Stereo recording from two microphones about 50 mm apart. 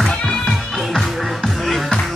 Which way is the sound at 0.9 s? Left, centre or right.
Centre.